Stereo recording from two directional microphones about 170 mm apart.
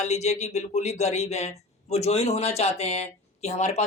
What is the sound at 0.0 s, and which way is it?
Speech, 40° left (ahead or behind).